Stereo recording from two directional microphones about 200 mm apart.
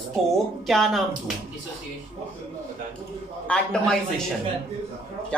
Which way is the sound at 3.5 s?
5° left (ahead or behind).